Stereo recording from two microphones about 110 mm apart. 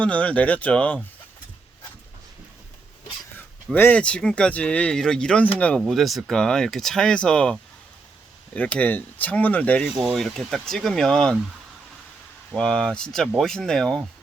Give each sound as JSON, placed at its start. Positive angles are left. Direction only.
{"t": 0.0, "sound": "speech", "side_deg": 10}
{"t": 3.8, "sound": "speech", "side_deg": 20}
{"t": 4.0, "sound": "speech", "side_deg": 10}
{"t": 5.9, "sound": "speech", "side_deg": 0}
{"t": 8.5, "sound": "speech", "side_deg": 15}
{"t": 10.0, "sound": "speech", "side_deg": 0}
{"t": 12.5, "sound": "speech", "side_deg": 5}